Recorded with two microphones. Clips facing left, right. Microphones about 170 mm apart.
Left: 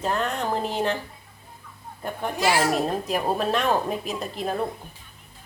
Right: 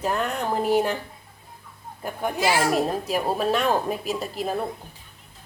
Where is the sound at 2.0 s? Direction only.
10° right (ahead or behind).